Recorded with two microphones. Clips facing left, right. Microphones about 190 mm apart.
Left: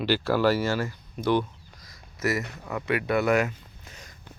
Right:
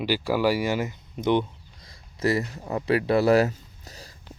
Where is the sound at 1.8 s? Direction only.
30° right (ahead or behind).